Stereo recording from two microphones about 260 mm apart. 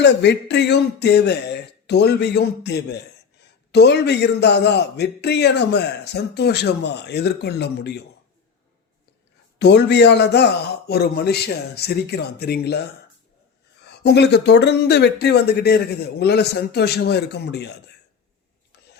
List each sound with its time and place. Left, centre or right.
0.0 s a man's voice: left
9.6 s a man's voice: left